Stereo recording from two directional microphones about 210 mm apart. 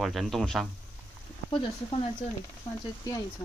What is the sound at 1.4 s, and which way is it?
Speech, 30° left (ahead or behind).